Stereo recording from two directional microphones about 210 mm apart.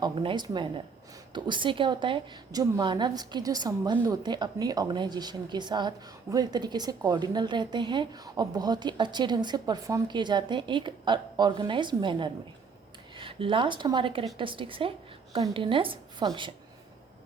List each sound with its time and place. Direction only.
0.0 s a woman's voice: 20° right (ahead or behind)